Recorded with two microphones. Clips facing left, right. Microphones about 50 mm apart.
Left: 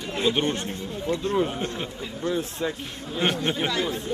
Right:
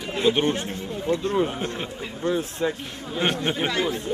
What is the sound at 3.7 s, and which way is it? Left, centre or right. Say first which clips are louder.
Speech: right 2 dB; right.